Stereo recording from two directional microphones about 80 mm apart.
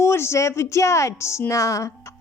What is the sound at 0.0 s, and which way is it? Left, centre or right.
Speech, left.